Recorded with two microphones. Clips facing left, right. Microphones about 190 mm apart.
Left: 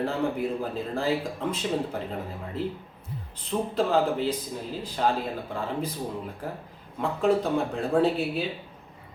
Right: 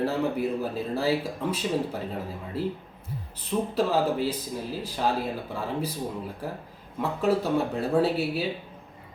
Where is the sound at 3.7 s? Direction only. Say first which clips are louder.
Left 1 dB; 10° right (ahead or behind).